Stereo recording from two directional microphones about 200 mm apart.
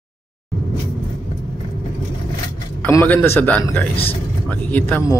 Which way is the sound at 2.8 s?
10° left (ahead or behind).